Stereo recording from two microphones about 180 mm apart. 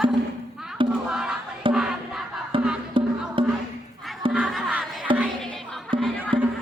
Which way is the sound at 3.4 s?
30° right (ahead or behind).